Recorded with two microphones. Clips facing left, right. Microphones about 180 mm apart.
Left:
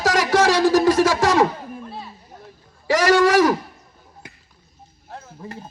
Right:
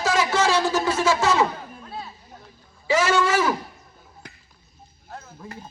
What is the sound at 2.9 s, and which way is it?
Speech, 65° left (ahead or behind).